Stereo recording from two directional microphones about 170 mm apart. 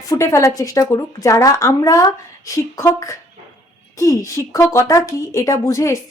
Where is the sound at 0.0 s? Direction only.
20° left (ahead or behind).